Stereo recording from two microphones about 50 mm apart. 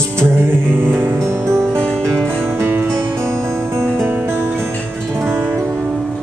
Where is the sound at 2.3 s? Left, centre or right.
Right.